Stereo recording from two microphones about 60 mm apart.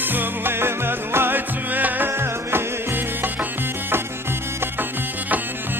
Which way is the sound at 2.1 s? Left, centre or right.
Right.